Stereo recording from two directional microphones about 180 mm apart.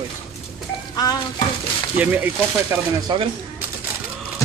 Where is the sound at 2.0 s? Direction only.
10° right (ahead or behind).